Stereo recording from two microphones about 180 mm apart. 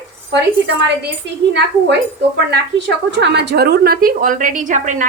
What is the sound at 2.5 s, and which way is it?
A woman's voice, 70° right (ahead or behind).